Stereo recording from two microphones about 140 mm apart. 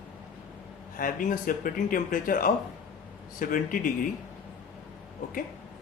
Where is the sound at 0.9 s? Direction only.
80° left.